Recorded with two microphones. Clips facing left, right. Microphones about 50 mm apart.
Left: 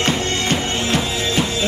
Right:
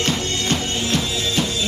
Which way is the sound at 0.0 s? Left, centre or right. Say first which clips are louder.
Left 3 dB; left.